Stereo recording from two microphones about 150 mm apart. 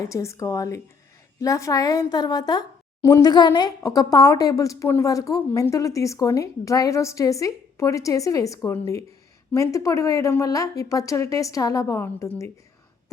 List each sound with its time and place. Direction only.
0.0 s a woman's voice: 20° left (ahead or behind)